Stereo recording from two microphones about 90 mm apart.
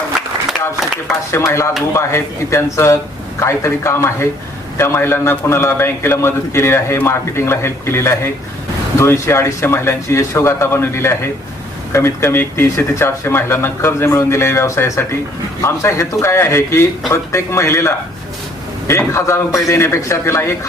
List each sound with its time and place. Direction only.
1.3 s a man's voice: 30° left (ahead or behind)